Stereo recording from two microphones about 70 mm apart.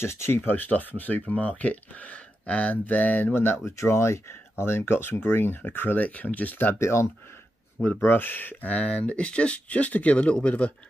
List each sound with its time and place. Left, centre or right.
0.0 s speech: left
0.5 s speech: left
6.8 s speech: left
8.0 s speech: left